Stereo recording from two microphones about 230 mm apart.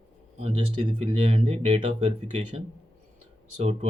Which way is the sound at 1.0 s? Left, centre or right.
Right.